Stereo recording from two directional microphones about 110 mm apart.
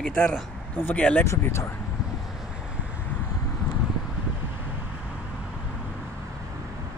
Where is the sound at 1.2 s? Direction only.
25° left (ahead or behind).